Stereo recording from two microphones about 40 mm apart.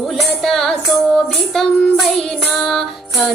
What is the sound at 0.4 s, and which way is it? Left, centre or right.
Music, centre.